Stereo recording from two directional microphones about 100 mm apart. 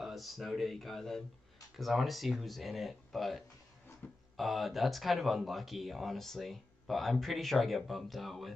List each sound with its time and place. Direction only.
0.0 s speech: centre (ahead or behind)
4.0 s a sound: 20° left (ahead or behind)
4.4 s speech: centre (ahead or behind)